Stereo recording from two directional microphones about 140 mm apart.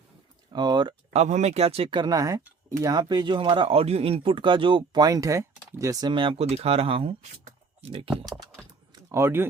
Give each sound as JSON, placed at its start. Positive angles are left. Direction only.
{"t": 0.5, "sound": "speech", "side_deg": -30}
{"t": 1.1, "sound": "speech", "side_deg": -55}
{"t": 9.1, "sound": "speech", "side_deg": -15}